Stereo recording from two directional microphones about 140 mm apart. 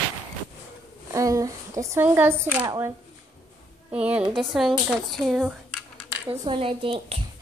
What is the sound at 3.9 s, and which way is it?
A woman's voice, 10° right (ahead or behind).